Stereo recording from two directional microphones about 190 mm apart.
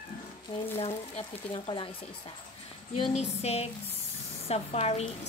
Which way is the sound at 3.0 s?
35° left (ahead or behind).